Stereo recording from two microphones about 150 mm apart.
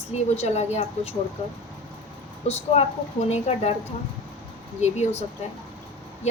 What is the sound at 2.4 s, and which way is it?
A woman's voice, 45° left (ahead or behind).